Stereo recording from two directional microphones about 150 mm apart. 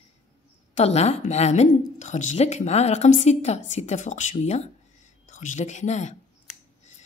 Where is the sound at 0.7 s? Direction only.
45° left (ahead or behind).